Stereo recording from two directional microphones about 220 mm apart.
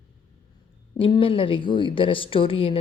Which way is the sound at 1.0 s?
25° left (ahead or behind).